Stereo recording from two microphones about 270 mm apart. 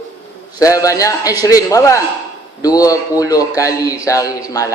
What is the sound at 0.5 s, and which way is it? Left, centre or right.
A man's voice, centre.